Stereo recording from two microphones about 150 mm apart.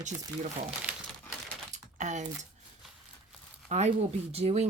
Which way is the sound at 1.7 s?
50° right (ahead or behind).